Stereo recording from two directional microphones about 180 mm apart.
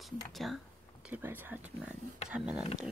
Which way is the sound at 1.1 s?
10° right (ahead or behind).